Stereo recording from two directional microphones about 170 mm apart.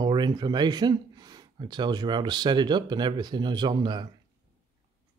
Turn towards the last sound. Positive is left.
turn(degrees=-25)  # may be behind; listen again after turning